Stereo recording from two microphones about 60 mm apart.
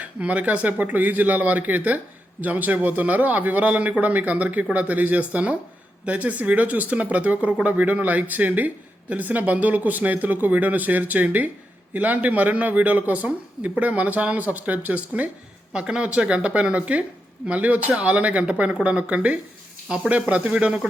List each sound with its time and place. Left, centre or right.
0.0 s speech: right
15.7 s speech: centre